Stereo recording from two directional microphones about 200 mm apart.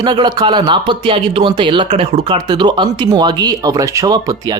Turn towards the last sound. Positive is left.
turn(degrees=-20)  # may be behind; listen again after turning